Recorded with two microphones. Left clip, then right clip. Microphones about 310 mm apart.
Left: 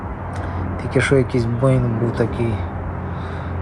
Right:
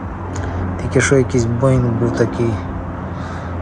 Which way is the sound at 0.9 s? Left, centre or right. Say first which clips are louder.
Right 3 dB; centre.